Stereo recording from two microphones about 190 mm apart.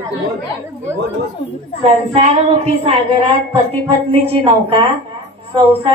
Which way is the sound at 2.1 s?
35° right (ahead or behind).